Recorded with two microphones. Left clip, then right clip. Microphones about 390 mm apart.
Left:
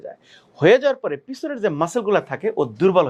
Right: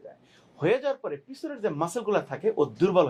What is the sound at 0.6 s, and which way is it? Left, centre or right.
A man's voice, left.